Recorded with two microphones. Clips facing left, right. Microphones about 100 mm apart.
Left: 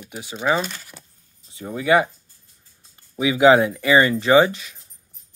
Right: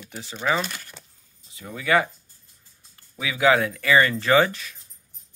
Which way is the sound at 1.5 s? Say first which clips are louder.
Left 5 dB; 30° left (ahead or behind).